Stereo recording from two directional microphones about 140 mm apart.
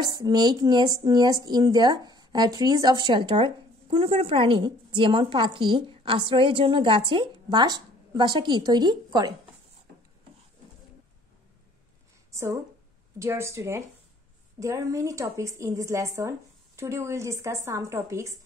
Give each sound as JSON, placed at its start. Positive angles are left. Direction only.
{"t": 0.0, "sound": "a woman's voice", "side_deg": -30}
{"t": 12.3, "sound": "a sound", "side_deg": -20}
{"t": 13.2, "sound": "speech", "side_deg": -20}